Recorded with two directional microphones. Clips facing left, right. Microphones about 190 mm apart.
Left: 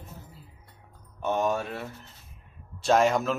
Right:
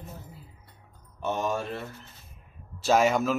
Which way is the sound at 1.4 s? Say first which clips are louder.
Left 3 dB; centre (ahead or behind).